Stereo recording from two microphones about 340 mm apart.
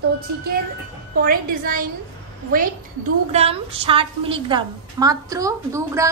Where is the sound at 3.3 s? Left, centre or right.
Centre.